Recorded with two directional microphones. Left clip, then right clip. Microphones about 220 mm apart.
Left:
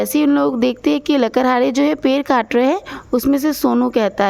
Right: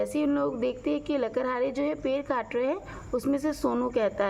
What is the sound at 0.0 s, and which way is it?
Speech, 45° left (ahead or behind).